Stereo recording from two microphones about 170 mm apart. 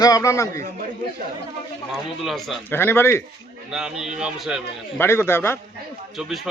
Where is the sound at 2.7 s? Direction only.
15° left (ahead or behind).